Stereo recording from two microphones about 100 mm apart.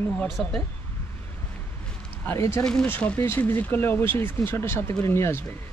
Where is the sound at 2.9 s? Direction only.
20° left (ahead or behind).